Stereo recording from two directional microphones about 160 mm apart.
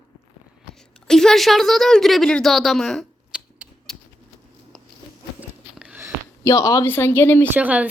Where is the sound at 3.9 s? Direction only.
5° left (ahead or behind).